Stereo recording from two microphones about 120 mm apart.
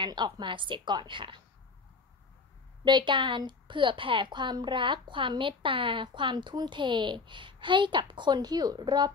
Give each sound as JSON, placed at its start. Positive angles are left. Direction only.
{"t": 0.0, "sound": "a woman's voice", "side_deg": -40}
{"t": 2.8, "sound": "a woman's voice", "side_deg": -40}